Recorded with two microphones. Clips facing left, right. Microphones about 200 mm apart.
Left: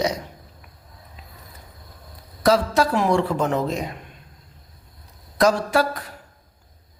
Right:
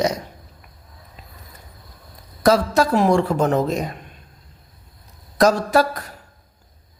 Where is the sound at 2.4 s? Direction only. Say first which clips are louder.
Right 2 dB; 45° right (ahead or behind).